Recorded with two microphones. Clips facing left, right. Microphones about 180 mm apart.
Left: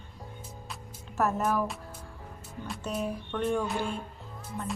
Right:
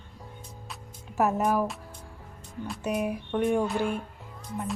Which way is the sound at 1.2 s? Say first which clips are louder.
Right 3 dB; 15° right (ahead or behind).